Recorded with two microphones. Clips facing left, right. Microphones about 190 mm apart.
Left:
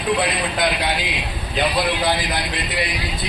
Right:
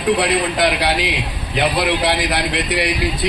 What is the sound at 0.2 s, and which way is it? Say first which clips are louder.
Speech: right 4 dB; 75° right (ahead or behind).